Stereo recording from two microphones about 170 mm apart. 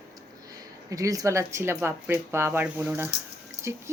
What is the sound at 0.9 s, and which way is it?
Speech, 20° right (ahead or behind).